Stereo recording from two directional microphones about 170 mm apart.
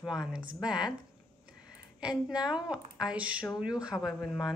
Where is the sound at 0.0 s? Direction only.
5° right (ahead or behind).